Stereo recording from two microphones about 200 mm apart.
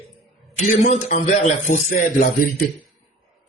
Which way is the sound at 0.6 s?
40° left (ahead or behind).